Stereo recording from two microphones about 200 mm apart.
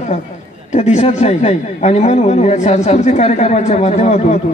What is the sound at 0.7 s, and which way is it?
A man's voice, 35° left (ahead or behind).